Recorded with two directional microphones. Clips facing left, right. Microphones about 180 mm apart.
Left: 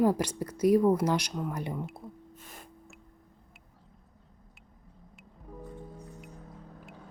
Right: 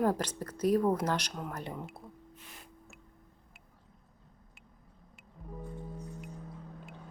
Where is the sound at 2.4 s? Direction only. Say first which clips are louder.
Left 4 dB; 45° left (ahead or behind).